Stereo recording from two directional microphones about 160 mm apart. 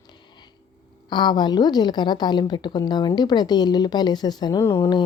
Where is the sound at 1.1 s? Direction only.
25° left (ahead or behind).